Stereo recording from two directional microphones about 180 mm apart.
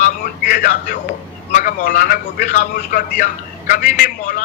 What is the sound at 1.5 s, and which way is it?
A man's voice, 50° left (ahead or behind).